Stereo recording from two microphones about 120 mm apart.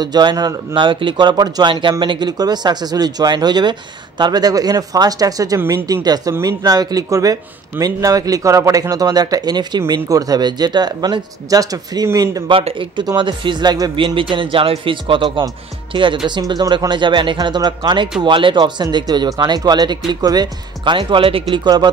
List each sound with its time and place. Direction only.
0.0 s a man's voice: 35° right (ahead or behind)
5.6 s speech: 20° right (ahead or behind)
6.0 s a man's voice: 35° right (ahead or behind)
12.4 s a man's voice: 45° right (ahead or behind)